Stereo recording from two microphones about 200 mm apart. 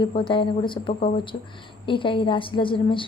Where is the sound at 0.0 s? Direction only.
25° left (ahead or behind).